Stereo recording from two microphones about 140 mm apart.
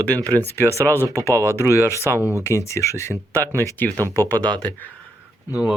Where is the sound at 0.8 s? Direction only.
15° left (ahead or behind).